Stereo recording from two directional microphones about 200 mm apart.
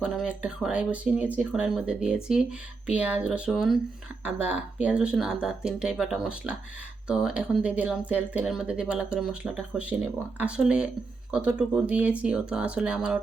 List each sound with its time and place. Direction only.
0.0 s speech: 5° right (ahead or behind)